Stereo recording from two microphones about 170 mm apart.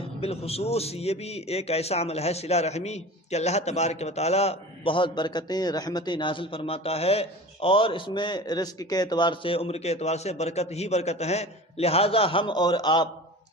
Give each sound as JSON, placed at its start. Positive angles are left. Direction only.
{"t": 0.2, "sound": "a man's voice", "side_deg": 35}